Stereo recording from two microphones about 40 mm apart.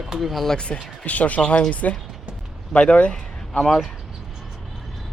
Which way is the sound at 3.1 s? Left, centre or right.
Centre.